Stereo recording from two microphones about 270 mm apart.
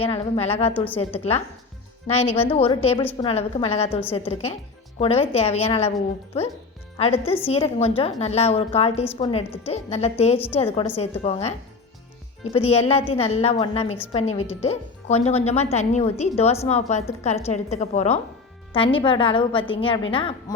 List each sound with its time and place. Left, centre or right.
0.0 s speech: left
3.0 s a woman's voice: centre
3.2 s speech: left
6.9 s speech: left
12.5 s speech: left